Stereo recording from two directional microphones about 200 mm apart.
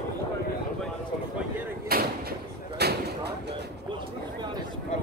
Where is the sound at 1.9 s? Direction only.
50° right (ahead or behind).